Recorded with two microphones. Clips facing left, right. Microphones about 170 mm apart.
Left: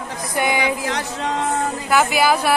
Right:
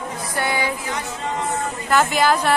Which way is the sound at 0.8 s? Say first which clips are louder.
Left 3 dB; 85° left.